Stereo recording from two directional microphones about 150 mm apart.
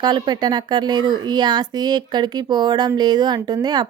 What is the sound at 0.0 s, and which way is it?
Speech, 30° right (ahead or behind).